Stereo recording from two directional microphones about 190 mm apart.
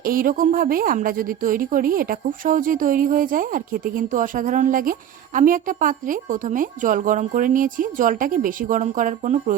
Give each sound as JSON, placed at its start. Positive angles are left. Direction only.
{"t": 0.0, "sound": "a woman's voice", "side_deg": -50}